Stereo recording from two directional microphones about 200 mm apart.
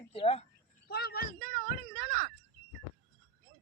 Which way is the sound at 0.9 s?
50° left (ahead or behind).